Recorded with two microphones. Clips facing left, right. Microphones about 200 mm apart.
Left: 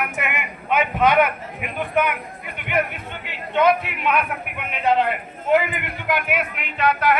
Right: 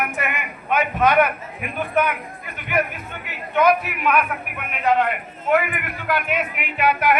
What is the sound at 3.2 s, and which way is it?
A man's voice, 25° left (ahead or behind).